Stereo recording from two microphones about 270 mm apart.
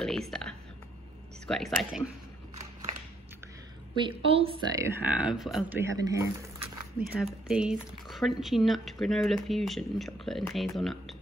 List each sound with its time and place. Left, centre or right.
0.0 s speech: centre
3.9 s speech: centre
4.8 s speech: centre